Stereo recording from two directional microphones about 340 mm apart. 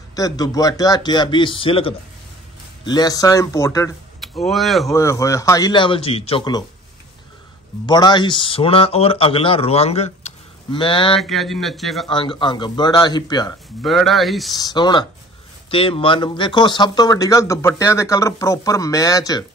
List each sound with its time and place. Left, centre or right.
0.1 s speech: centre
7.8 s speech: centre
11.1 s speech: centre
12.1 s speech: centre
13.8 s speech: centre
14.5 s speech: centre